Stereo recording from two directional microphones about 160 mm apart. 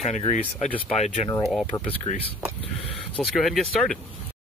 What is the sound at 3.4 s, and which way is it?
Speech, centre (ahead or behind).